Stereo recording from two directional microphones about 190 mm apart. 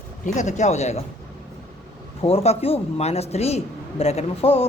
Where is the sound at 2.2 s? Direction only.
30° left (ahead or behind).